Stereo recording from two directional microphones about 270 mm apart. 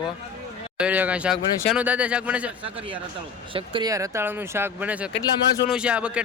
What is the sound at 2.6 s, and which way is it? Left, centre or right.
A man's voice, right.